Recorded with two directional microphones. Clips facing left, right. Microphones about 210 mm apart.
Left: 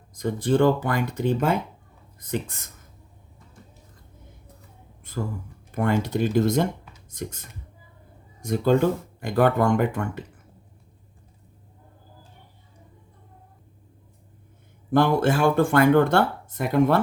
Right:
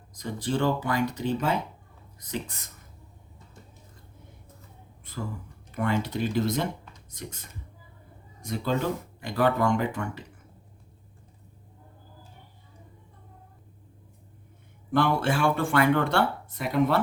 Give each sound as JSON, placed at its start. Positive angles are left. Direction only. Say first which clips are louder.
{"t": 0.1, "sound": "speech", "louder": "left 7 dB", "side_deg": 50}
{"t": 5.7, "sound": "speech", "louder": "left 4 dB", "side_deg": 50}
{"t": 14.9, "sound": "speech", "louder": "left 5 dB", "side_deg": 45}